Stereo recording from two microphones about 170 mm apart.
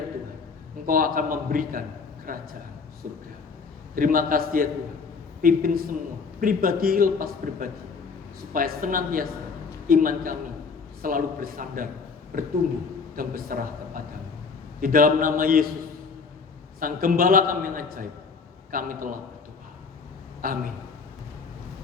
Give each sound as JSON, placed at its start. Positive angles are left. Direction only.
{"t": 0.9, "sound": "a man's voice", "side_deg": -55}
{"t": 3.9, "sound": "a man's voice", "side_deg": -55}
{"t": 16.8, "sound": "a man's voice", "side_deg": -55}
{"t": 20.4, "sound": "a man's voice", "side_deg": -60}